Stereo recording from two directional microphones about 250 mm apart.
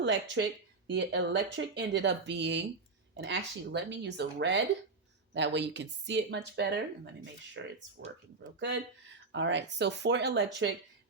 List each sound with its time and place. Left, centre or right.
0.0 s speech: right